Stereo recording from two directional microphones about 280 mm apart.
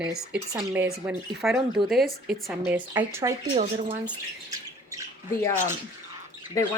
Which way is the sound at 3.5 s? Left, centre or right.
Right.